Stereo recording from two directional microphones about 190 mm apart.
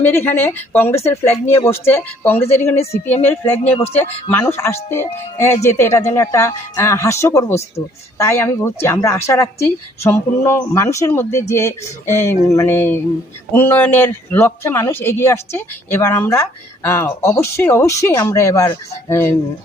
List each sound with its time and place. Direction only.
0.0 s a man's voice: 10° left (ahead or behind)